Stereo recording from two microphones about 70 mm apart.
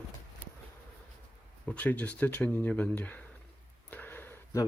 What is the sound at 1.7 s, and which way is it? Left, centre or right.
Speech, left.